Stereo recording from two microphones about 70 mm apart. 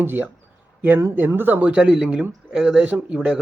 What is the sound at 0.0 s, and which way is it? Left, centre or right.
Speech, right.